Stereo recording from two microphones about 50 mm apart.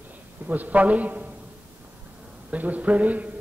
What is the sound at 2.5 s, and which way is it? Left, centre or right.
Speech, right.